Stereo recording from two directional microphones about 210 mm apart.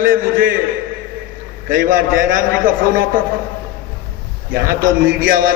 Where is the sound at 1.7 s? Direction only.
40° right (ahead or behind).